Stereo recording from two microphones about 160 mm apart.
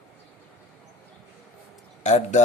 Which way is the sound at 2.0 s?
45° left (ahead or behind).